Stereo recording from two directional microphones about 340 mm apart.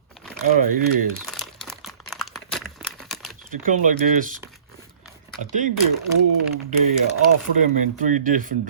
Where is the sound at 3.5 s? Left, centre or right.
Right.